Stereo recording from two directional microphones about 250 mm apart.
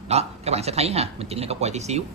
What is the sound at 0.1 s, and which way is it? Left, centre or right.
A man's voice, right.